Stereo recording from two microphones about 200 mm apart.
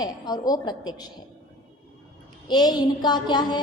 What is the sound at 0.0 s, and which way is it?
A woman's voice, 20° left (ahead or behind).